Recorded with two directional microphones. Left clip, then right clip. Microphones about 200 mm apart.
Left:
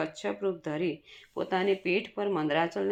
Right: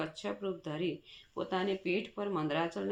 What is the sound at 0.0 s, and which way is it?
Speech, 25° left (ahead or behind).